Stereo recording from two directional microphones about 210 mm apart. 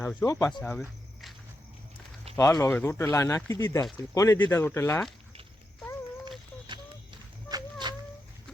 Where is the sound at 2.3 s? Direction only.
25° right (ahead or behind).